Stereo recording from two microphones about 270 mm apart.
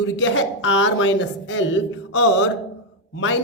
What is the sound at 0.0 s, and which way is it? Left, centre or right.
A woman's voice, left.